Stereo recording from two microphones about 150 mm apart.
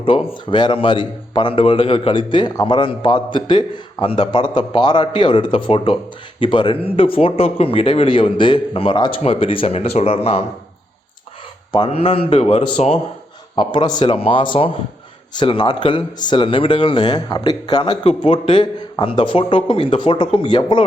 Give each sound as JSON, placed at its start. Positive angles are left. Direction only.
{"t": 0.0, "sound": "a man's voice", "side_deg": 35}
{"t": 11.7, "sound": "a man's voice", "side_deg": 40}
{"t": 18.0, "sound": "a man's voice", "side_deg": 40}